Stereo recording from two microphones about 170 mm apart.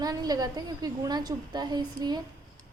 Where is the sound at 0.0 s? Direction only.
25° right (ahead or behind).